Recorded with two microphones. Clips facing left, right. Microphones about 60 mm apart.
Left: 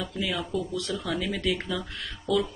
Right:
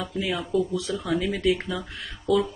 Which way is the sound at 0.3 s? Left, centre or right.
Centre.